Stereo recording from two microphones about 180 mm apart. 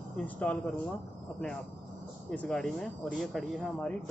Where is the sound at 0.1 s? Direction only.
10° left (ahead or behind).